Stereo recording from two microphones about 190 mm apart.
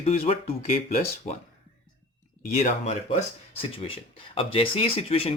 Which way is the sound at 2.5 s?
40° left (ahead or behind).